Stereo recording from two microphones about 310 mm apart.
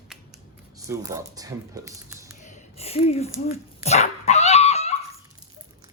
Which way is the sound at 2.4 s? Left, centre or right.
Left.